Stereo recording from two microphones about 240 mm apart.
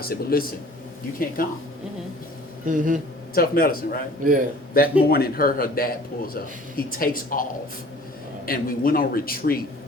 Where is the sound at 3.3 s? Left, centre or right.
Left.